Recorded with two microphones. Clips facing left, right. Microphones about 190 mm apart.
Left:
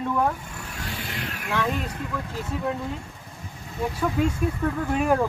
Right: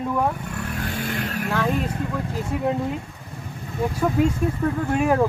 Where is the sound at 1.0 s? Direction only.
45° right (ahead or behind).